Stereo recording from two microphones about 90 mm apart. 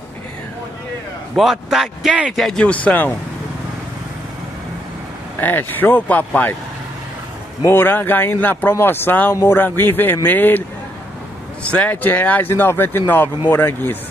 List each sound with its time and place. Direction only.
1.3 s speech: centre (ahead or behind)
2.6 s speech: 15° left (ahead or behind)
5.4 s speech: 20° left (ahead or behind)
7.7 s speech: 25° left (ahead or behind)
11.6 s speech: 15° left (ahead or behind)